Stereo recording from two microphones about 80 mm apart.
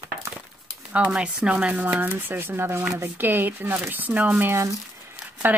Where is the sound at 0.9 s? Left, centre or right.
Centre.